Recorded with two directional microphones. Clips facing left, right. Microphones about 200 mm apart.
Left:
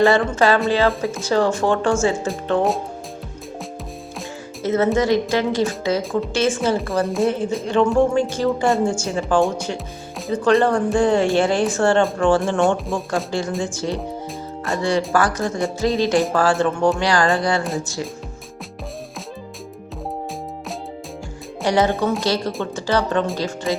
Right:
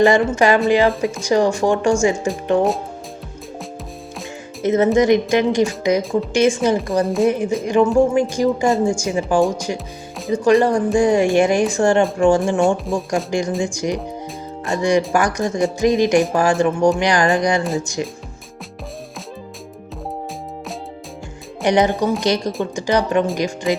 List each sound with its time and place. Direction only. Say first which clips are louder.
0.0 s a woman's voice: right 2 dB; 15° right (ahead or behind)
4.6 s a woman's voice: right 3 dB; 15° right (ahead or behind)
7.0 s speech: right 2 dB; centre (ahead or behind)
7.3 s a woman's voice: right 3 dB; 15° right (ahead or behind)
9.7 s music: right 1 dB; centre (ahead or behind)
10.3 s a woman's voice: right 2 dB; 10° right (ahead or behind)
12.5 s speech: right 2 dB; centre (ahead or behind)
13.3 s a woman's voice: right 3 dB; 15° right (ahead or behind)
21.6 s a woman's voice: right 2 dB; 20° right (ahead or behind)